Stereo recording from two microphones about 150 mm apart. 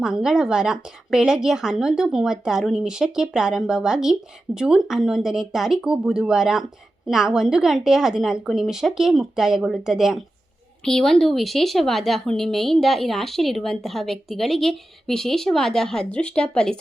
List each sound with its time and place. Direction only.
0.0 s a woman's voice: 5° right (ahead or behind)